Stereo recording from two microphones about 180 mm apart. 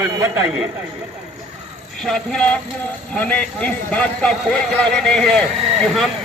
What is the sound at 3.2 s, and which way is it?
A man's voice, 5° left (ahead or behind).